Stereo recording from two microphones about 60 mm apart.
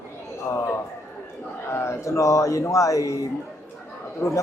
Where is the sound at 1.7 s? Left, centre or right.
Left.